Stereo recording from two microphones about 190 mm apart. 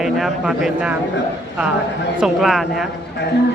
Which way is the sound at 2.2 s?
Centre (ahead or behind).